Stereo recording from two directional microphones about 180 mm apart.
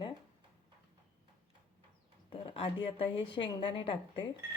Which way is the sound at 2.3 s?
30° left (ahead or behind).